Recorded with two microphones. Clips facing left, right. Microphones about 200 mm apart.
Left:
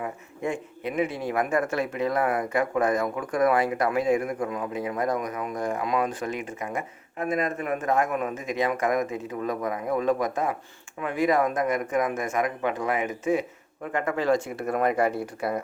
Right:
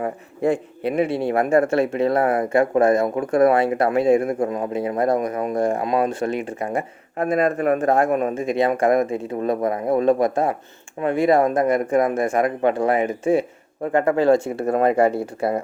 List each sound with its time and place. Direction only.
0.0 s a man's voice: 35° right (ahead or behind)
7.3 s speech: 65° right (ahead or behind)
7.8 s a man's voice: 35° right (ahead or behind)